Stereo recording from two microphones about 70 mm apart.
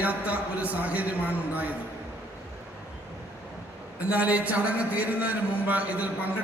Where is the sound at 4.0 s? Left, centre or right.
Right.